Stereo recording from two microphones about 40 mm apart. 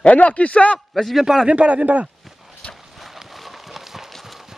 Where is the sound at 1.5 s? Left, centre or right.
Right.